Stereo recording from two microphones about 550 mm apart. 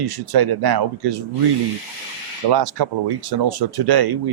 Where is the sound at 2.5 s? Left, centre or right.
Right.